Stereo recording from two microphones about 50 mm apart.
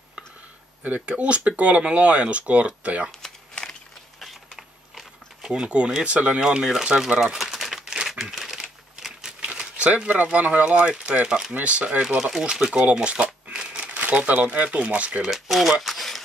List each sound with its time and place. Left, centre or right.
0.8 s speech: right
3.2 s crumpling: centre
4.2 s a sound: centre
5.5 s speech: centre
6.4 s speech: centre
7.3 s crumpling: centre
9.6 s speech: right
11.2 s speech: centre
11.5 s speech: right
12.2 s speech: centre
12.9 s shuffling cards: right
13.8 s speech: right
15.2 s speech: centre
15.8 s a sound: centre